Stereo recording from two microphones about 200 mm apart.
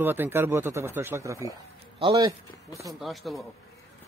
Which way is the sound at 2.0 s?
25° right (ahead or behind).